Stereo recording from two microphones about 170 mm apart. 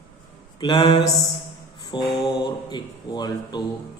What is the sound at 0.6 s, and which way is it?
Speech, 25° left (ahead or behind).